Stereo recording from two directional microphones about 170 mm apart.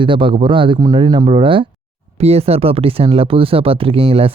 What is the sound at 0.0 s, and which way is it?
Speech, 30° right (ahead or behind).